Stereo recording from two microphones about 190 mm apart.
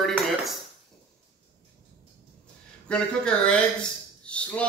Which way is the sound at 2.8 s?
5° left (ahead or behind).